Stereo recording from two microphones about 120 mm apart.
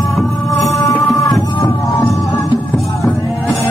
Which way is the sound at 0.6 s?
25° left (ahead or behind).